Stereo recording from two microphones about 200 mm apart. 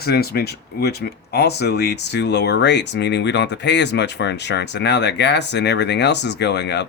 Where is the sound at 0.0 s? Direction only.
50° left (ahead or behind).